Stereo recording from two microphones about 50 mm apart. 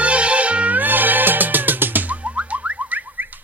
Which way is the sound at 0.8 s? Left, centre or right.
Right.